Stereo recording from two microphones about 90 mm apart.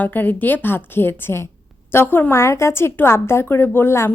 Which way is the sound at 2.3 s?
30° left (ahead or behind).